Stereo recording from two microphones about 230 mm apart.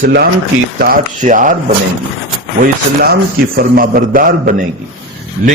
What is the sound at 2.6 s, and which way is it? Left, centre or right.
A man's voice, right.